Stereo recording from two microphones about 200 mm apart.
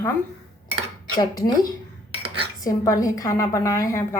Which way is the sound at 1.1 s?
20° left (ahead or behind).